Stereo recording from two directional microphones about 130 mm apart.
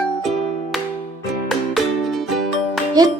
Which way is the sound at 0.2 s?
Centre (ahead or behind).